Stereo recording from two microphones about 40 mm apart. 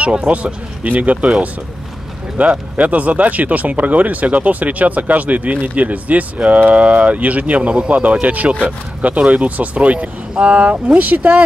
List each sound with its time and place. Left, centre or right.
0.3 s speech: right
2.4 s speech: right
11.0 s speech: right